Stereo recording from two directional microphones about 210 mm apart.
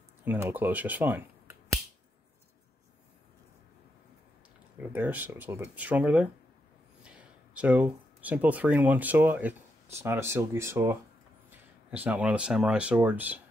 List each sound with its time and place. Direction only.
0.2 s speech: 10° right (ahead or behind)
4.9 s speech: 10° right (ahead or behind)